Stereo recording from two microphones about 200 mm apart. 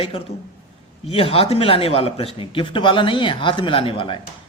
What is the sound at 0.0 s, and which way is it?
Speech, 30° left (ahead or behind).